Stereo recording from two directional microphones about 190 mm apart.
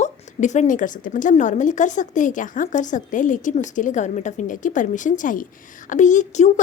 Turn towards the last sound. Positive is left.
turn(degrees=40)  # may be behind; listen again after turning